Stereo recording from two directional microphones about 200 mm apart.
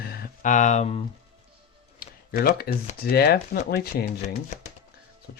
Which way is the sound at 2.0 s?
50° left (ahead or behind).